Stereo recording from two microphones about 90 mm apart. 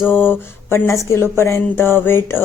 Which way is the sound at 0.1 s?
25° left (ahead or behind).